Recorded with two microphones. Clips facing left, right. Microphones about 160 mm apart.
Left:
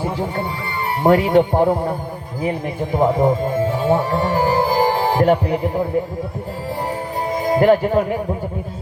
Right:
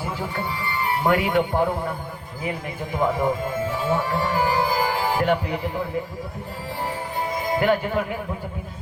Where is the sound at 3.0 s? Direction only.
35° left (ahead or behind).